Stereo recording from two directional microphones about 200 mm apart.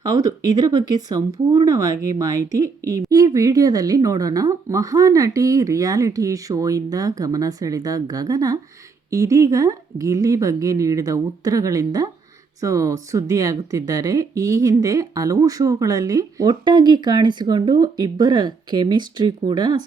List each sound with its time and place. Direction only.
0.0 s speech: 20° right (ahead or behind)